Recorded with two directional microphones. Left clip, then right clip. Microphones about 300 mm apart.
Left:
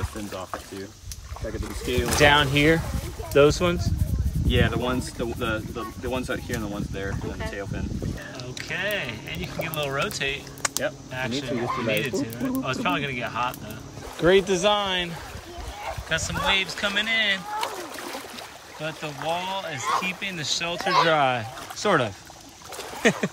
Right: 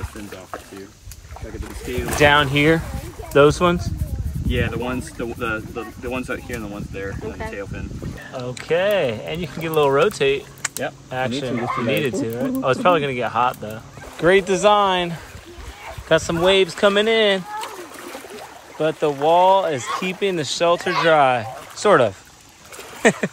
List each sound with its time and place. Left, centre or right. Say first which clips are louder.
2.1 s speech: right 4 dB; centre
8.4 s speech: right 11 dB; centre
18.8 s speech: right 13 dB; centre